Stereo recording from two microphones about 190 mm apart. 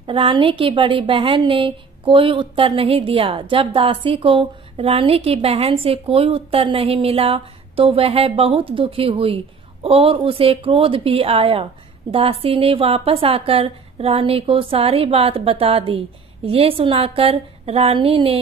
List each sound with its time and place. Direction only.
0.0 s a woman's voice: 25° right (ahead or behind)